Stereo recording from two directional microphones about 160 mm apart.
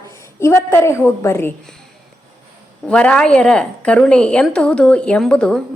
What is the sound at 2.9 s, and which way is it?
A woman's voice, 5° left (ahead or behind).